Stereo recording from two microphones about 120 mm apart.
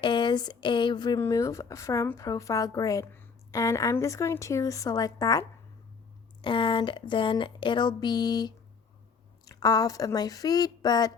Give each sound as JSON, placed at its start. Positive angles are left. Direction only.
{"t": 0.0, "sound": "speech", "side_deg": 40}
{"t": 1.2, "sound": "speech", "side_deg": 25}
{"t": 6.4, "sound": "speech", "side_deg": 45}